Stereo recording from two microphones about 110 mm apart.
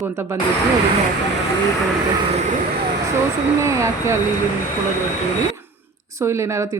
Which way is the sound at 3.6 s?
25° right (ahead or behind).